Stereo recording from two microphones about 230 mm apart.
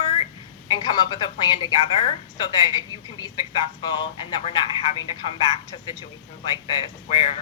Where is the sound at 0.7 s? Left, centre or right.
Centre.